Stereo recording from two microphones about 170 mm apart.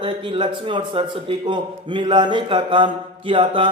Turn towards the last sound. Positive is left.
turn(degrees=-30)  # may be behind; listen again after turning